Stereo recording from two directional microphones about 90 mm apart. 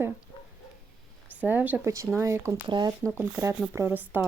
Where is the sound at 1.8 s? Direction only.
35° right (ahead or behind).